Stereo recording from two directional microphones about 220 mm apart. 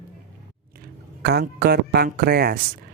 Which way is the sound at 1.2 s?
45° right (ahead or behind).